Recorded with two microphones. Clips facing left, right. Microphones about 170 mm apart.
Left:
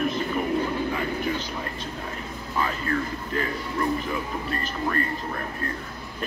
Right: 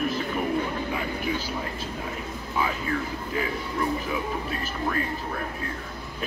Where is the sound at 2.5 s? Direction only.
5° right (ahead or behind).